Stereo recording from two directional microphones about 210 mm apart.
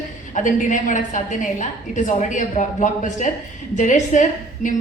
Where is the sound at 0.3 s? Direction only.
40° left (ahead or behind).